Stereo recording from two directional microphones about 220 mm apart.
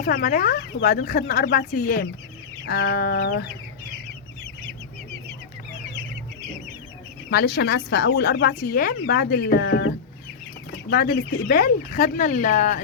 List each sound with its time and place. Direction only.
0.0 s speech: 40° left (ahead or behind)
7.3 s speech: 45° left (ahead or behind)